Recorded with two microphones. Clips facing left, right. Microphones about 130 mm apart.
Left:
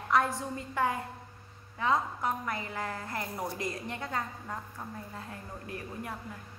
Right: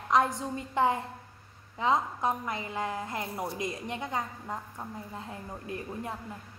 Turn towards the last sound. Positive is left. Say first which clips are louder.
# right 3 dB
turn(degrees=-20)  # may be behind; listen again after turning